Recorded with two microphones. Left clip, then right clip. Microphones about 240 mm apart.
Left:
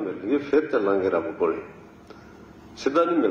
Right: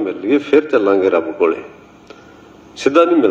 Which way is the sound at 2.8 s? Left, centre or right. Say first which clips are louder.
Right 10 dB; right.